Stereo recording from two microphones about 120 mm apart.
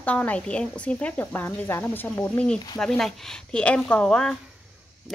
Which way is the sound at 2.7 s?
5° left (ahead or behind).